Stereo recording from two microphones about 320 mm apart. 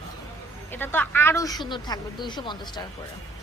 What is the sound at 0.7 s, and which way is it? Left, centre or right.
A woman's voice, centre.